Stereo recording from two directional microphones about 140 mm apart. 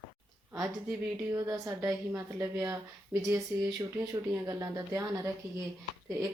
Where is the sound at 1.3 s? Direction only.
20° right (ahead or behind).